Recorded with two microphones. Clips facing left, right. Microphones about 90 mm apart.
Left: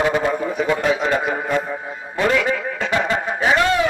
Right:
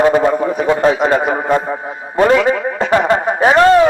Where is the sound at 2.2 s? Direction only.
35° right (ahead or behind).